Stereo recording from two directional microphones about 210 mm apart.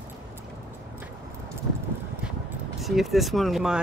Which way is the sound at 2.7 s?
Centre (ahead or behind).